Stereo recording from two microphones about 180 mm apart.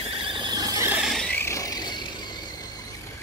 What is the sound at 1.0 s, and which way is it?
Vehicle, centre (ahead or behind).